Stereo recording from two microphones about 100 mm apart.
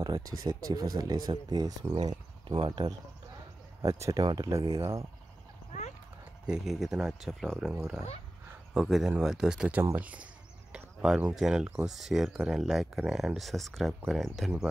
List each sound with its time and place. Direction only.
0.0 s speech: 40° right (ahead or behind); by 2.8 s 55° right (ahead or behind)
3.8 s speech: 30° right (ahead or behind)
4.2 s speech: 45° right (ahead or behind)
4.5 s speech: 30° right (ahead or behind)
6.4 s speech: 5° right (ahead or behind)
8.7 s speech: 5° right (ahead or behind)
10.7 s a sound: 10° right (ahead or behind)
11.3 s speech: 5° right (ahead or behind)